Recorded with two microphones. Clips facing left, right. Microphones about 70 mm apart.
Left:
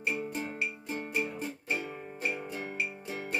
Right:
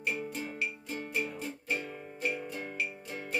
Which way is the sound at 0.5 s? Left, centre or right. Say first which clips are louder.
Left 1 dB; left.